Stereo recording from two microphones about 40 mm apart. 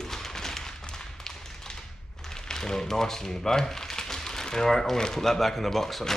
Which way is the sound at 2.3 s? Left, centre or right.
Centre.